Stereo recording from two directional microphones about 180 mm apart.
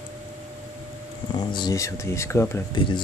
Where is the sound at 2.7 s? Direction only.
25° left (ahead or behind).